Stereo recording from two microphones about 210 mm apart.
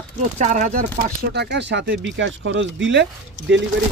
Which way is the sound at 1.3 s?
55° right (ahead or behind).